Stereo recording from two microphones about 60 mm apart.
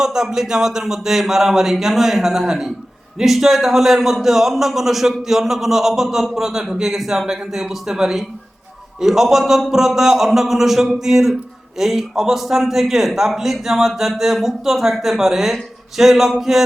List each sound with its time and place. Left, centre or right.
0.0 s a man's voice: centre